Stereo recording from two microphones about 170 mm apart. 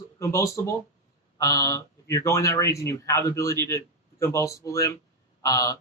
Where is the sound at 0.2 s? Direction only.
15° left (ahead or behind).